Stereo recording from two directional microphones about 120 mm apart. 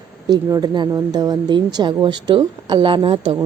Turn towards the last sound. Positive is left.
turn(degrees=-45)  # may be behind; listen again after turning